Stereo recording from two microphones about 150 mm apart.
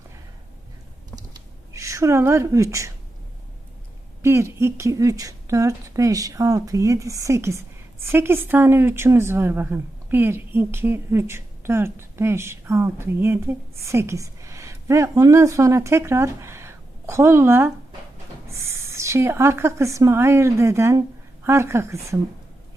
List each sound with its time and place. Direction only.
1.7 s a woman's voice: 20° right (ahead or behind)
4.2 s speech: 20° right (ahead or behind)